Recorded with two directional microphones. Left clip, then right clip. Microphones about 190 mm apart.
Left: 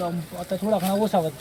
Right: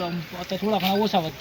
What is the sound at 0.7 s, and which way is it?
Speech, 50° left (ahead or behind).